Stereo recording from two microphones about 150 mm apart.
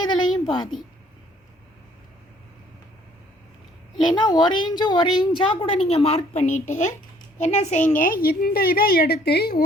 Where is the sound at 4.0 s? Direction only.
30° left (ahead or behind).